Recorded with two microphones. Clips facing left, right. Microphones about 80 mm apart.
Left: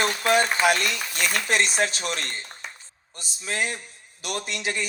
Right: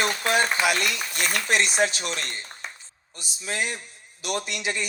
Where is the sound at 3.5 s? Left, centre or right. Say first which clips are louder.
Left 1 dB; centre.